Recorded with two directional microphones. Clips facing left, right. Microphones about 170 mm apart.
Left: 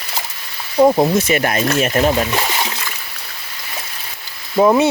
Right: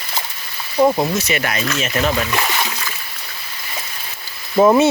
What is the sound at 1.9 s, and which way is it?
Speech, 35° left (ahead or behind).